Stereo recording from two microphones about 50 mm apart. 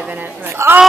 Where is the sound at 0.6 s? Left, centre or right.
Right.